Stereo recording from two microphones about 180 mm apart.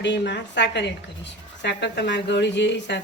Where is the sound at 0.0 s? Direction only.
75° left (ahead or behind).